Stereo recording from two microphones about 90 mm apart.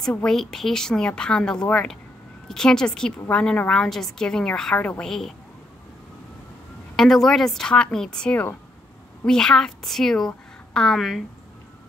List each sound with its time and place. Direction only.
0.1 s a woman's voice: 5° left (ahead or behind)
4.7 s speech: 15° left (ahead or behind)
5.0 s a woman's voice: 5° left (ahead or behind)
7.0 s a woman's voice: 5° left (ahead or behind)